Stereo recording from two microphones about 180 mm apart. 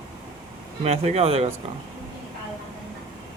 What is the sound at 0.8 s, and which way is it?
Speech, 35° right (ahead or behind).